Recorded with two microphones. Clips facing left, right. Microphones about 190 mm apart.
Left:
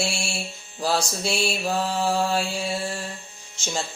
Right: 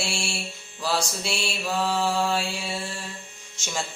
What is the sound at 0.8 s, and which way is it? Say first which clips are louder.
Mantra: left 3 dB; 40° left (ahead or behind).